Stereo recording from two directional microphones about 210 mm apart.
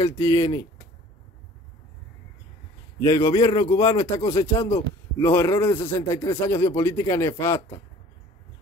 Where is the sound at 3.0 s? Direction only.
15° left (ahead or behind).